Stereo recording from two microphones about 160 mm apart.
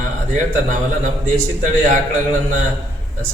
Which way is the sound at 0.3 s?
50° right (ahead or behind).